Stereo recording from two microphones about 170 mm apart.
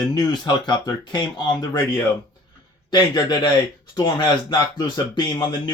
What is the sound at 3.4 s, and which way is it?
Speech, 25° left (ahead or behind).